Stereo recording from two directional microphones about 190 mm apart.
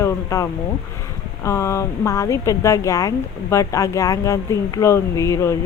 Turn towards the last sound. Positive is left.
turn(degrees=15)  # may be behind; listen again after turning